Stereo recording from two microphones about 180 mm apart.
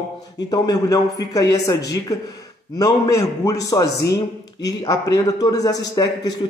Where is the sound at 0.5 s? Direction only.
20° left (ahead or behind).